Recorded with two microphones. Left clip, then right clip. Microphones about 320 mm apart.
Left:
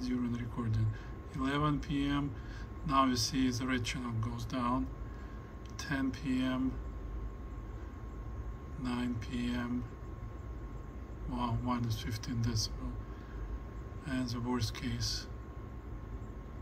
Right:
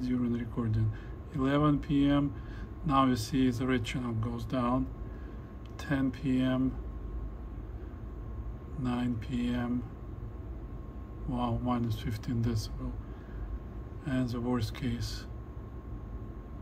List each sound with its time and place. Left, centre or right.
0.0 s a sound: centre
1.3 s a man's voice: centre
8.8 s a man's voice: centre
11.3 s a man's voice: centre
14.0 s a man's voice: centre